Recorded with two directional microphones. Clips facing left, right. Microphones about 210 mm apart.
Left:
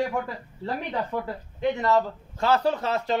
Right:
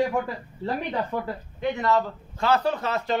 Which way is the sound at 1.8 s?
35° left (ahead or behind).